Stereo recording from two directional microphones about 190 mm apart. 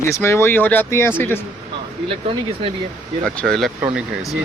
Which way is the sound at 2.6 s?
30° right (ahead or behind).